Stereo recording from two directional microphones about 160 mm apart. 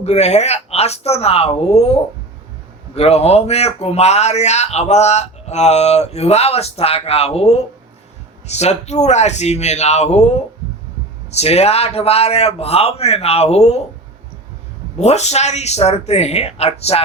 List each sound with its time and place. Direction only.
0.0 s speech: 45° left (ahead or behind)
11.3 s speech: 40° left (ahead or behind)
14.9 s speech: 45° left (ahead or behind)